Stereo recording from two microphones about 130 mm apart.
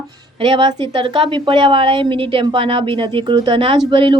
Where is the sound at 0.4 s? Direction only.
40° right (ahead or behind).